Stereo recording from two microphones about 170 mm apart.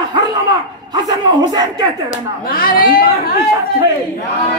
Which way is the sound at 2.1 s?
55° left (ahead or behind).